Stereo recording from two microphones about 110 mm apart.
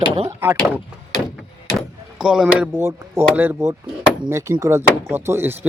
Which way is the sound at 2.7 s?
25° right (ahead or behind).